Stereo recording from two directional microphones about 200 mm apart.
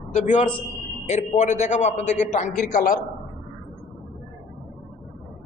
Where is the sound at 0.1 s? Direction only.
35° left (ahead or behind).